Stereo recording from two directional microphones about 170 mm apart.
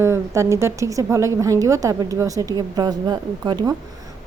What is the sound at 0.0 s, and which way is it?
A woman's voice, 15° right (ahead or behind).